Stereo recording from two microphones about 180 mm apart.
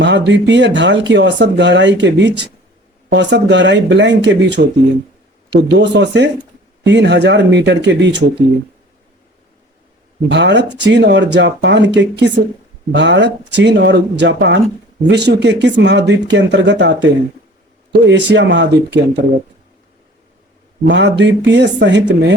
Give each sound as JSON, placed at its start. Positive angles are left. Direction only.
{"t": 0.0, "sound": "speech", "side_deg": -80}
{"t": 10.2, "sound": "speech", "side_deg": -80}
{"t": 18.1, "sound": "speech", "side_deg": -80}
{"t": 20.8, "sound": "speech", "side_deg": -75}